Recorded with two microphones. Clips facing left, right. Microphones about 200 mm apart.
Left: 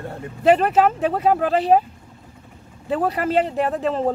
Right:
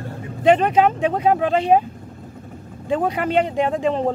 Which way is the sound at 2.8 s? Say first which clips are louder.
Right 1 dB; centre (ahead or behind).